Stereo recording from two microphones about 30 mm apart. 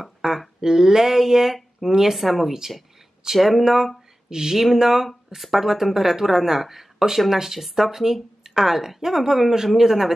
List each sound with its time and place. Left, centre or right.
0.2 s a sound: centre
0.6 s speech: right; by 3.6 s centre
3.6 s speech: centre